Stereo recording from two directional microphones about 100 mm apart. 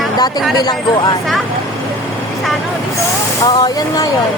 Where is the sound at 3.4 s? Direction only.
40° left (ahead or behind).